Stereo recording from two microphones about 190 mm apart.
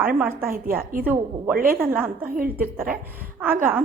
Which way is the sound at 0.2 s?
10° right (ahead or behind).